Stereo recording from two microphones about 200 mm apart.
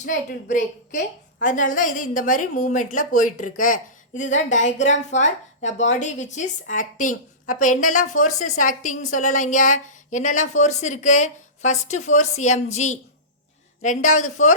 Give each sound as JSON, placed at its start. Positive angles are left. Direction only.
{"t": 0.0, "sound": "a woman's voice", "side_deg": 40}